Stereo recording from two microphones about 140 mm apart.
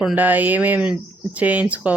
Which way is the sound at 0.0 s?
10° right (ahead or behind).